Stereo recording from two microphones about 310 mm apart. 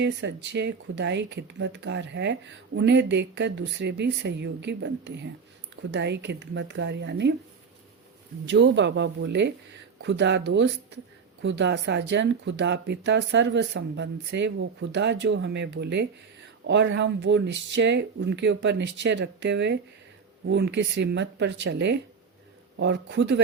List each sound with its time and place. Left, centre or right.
0.0 s speech: right
8.4 s speech: right